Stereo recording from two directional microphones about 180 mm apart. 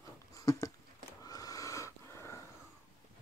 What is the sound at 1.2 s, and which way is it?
Wheeze, 20° left (ahead or behind).